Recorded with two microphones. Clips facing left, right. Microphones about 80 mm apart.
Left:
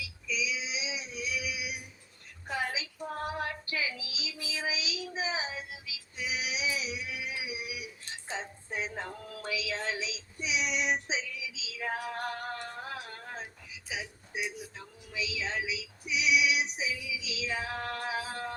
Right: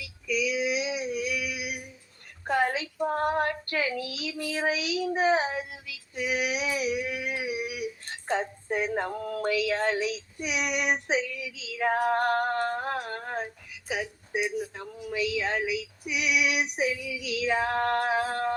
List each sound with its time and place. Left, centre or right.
0.0 s female singing: right
2.5 s child singing: right